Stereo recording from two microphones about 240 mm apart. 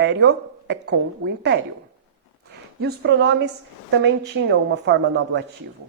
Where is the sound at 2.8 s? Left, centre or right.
Right.